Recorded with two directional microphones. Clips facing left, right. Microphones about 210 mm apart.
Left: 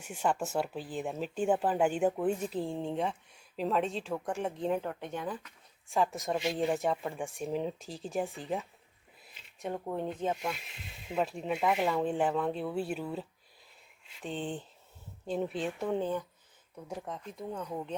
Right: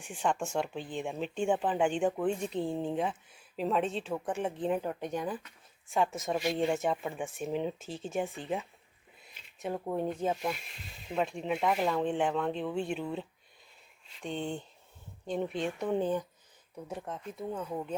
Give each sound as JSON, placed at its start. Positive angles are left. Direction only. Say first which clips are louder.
{"t": 0.0, "sound": "speech", "louder": "even", "side_deg": 5}
{"t": 4.9, "sound": "speech", "louder": "right 3 dB", "side_deg": -15}
{"t": 11.1, "sound": "speech", "louder": "even", "side_deg": 5}
{"t": 16.0, "sound": "speech", "louder": "right 5 dB", "side_deg": -15}
{"t": 16.9, "sound": "speech", "louder": "even", "side_deg": 0}